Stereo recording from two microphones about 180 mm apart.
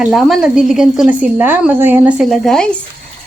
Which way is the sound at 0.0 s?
Centre (ahead or behind).